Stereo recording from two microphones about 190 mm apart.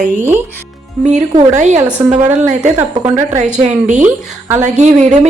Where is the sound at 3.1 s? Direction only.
35° right (ahead or behind).